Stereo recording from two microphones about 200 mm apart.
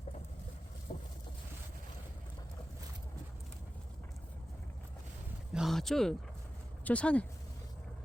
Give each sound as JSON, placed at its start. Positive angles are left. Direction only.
{"t": 0.9, "sound": "boat", "side_deg": 35}
{"t": 5.5, "sound": "speech", "side_deg": 0}